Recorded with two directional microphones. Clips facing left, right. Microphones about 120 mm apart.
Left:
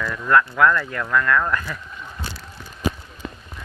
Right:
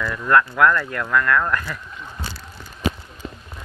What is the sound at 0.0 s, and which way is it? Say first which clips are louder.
Speech: right 1 dB; 5° left (ahead or behind).